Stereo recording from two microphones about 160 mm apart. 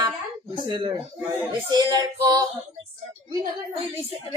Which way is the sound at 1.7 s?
25° right (ahead or behind).